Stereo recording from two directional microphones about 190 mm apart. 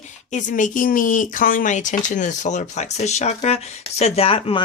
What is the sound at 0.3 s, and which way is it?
Speech, 40° left (ahead or behind).